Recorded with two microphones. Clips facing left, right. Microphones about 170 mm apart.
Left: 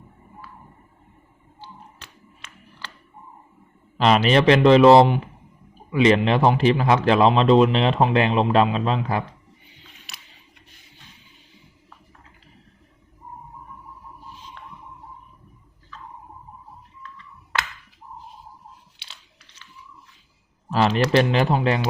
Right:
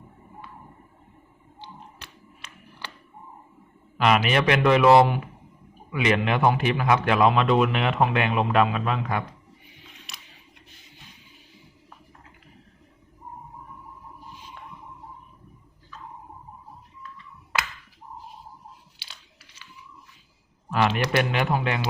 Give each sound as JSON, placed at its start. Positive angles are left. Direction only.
{"t": 1.6, "sound": "music", "side_deg": -15}
{"t": 3.9, "sound": "a man's voice", "side_deg": 30}
{"t": 10.1, "sound": "a sound", "side_deg": 0}
{"t": 18.9, "sound": "crunch", "side_deg": -5}
{"t": 20.7, "sound": "speech", "side_deg": 30}